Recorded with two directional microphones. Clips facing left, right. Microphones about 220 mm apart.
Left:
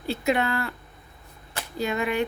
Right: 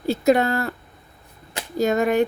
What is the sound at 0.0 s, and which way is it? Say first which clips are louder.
Speech: right 7 dB; 40° right (ahead or behind).